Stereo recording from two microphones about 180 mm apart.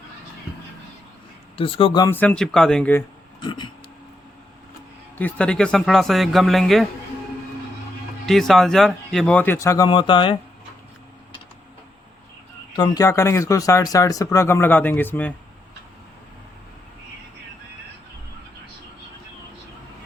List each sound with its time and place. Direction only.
1.5 s speech: 30° left (ahead or behind)
2.0 s a man's voice: 10° left (ahead or behind)
3.4 s a sound: 25° left (ahead or behind)
5.1 s a man's voice: 10° left (ahead or behind)
8.3 s speech: centre (ahead or behind); by 10.3 s 30° left (ahead or behind)
12.7 s speech: 25° left (ahead or behind)